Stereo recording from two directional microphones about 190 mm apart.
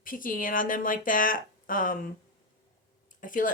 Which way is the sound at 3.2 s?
45° left (ahead or behind).